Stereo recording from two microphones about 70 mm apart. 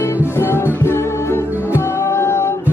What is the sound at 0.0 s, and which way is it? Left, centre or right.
Music, left.